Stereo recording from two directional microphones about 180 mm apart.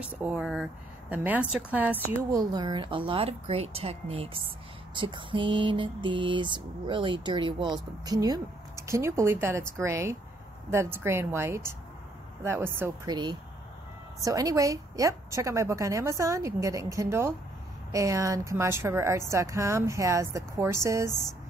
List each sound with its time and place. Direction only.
0.0 s a woman's voice: 5° right (ahead or behind)
2.3 s mantra: 25° right (ahead or behind)
10.7 s a woman's voice: 15° right (ahead or behind)